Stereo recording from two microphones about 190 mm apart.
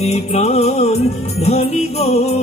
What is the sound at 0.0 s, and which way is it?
Music, 35° left (ahead or behind).